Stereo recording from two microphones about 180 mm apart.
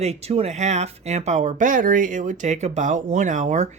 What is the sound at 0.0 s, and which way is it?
Speech, 35° right (ahead or behind).